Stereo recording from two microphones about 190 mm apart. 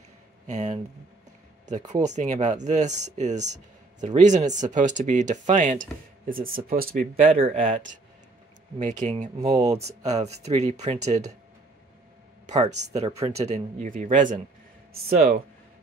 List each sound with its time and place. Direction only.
0.5 s speech: 40° right (ahead or behind)
2.0 s speech: 40° right (ahead or behind)
7.4 s speech: 30° right (ahead or behind)
8.7 s speech: 40° right (ahead or behind)
12.4 s speech: 35° right (ahead or behind)